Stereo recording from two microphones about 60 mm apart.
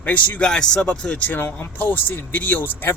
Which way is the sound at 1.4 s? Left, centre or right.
Left.